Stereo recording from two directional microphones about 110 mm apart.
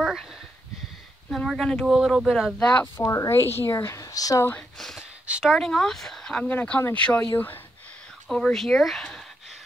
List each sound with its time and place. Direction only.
0.0 s sniff: centre (ahead or behind)
1.3 s speech: 5° left (ahead or behind); by 4.5 s 30° left (ahead or behind)
4.7 s speech: 5° left (ahead or behind)
5.2 s speech: 10° right (ahead or behind)
5.6 s speech: 5° left (ahead or behind)
8.3 s speech: 5° left (ahead or behind)